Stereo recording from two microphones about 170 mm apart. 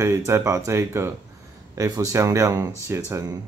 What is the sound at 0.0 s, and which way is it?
Speech, 15° right (ahead or behind).